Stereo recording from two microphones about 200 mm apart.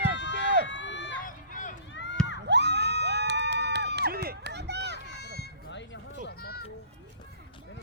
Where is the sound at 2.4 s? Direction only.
60° right (ahead or behind).